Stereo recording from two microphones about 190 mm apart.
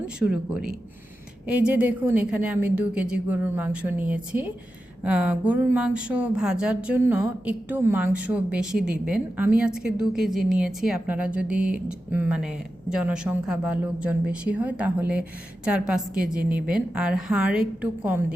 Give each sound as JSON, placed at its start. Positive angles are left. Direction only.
{"t": 0.2, "sound": "a woman's voice", "side_deg": -5}